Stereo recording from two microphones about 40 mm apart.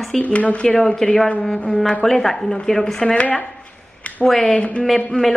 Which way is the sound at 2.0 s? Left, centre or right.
Centre.